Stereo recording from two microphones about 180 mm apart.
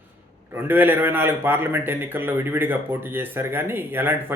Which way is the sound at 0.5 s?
10° right (ahead or behind).